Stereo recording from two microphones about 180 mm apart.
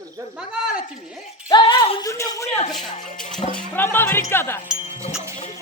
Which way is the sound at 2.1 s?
15° left (ahead or behind).